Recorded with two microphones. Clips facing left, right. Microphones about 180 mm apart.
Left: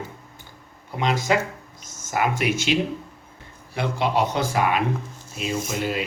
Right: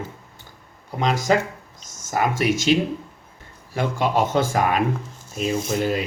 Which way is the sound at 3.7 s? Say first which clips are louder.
Right 2 dB; 45° right (ahead or behind).